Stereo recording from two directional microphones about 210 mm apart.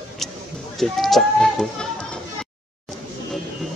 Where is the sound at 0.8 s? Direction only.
Centre (ahead or behind).